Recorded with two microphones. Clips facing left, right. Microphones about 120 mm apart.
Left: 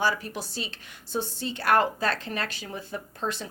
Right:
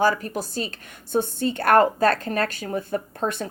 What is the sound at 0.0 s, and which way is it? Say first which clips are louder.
A woman's voice: right 6 dB; 45° right (ahead or behind).